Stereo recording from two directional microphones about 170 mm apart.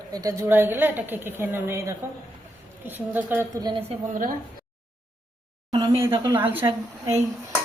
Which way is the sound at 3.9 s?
50° right (ahead or behind).